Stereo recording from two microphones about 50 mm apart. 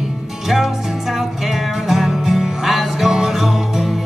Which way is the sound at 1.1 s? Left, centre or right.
Centre.